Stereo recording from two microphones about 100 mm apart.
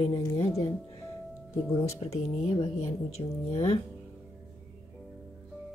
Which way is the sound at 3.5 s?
90° left.